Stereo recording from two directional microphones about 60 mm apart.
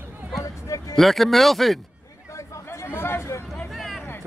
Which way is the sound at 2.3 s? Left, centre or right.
Left.